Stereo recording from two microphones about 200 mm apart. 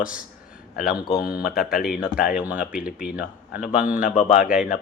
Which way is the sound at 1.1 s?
50° left (ahead or behind).